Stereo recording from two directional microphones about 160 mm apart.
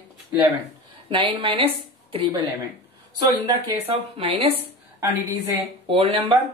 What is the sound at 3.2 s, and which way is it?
Speech, 25° right (ahead or behind).